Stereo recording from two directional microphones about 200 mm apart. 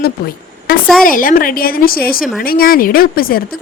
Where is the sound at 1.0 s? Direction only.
45° left (ahead or behind).